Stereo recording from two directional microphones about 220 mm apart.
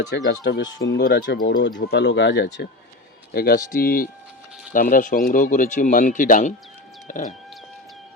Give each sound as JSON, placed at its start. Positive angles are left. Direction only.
{"t": 0.3, "sound": "speech", "side_deg": 50}